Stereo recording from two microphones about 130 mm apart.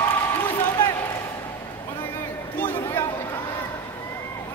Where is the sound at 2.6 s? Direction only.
15° left (ahead or behind).